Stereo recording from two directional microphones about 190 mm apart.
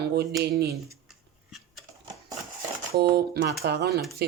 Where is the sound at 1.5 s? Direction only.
Centre (ahead or behind).